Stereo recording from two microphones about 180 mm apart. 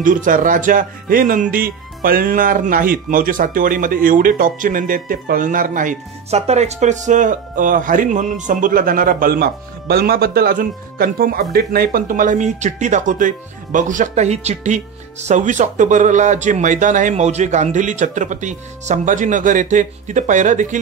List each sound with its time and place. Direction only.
0.0 s speech: 50° right (ahead or behind)